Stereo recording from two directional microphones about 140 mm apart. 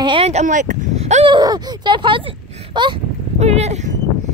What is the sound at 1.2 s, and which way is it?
Speech, 30° right (ahead or behind).